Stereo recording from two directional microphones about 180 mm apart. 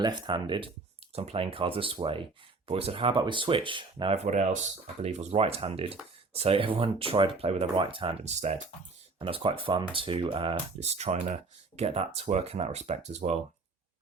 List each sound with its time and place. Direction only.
0.0 s speech: 25° right (ahead or behind); by 8.6 s 40° right (ahead or behind)
9.1 s speech: 30° right (ahead or behind)